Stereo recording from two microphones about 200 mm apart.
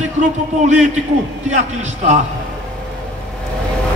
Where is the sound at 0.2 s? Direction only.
35° right (ahead or behind).